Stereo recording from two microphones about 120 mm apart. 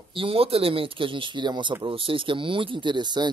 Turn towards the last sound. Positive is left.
turn(degrees=-40)  # may be behind; listen again after turning